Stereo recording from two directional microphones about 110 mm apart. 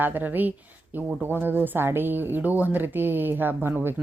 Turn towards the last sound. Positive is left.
turn(degrees=-20)  # may be behind; listen again after turning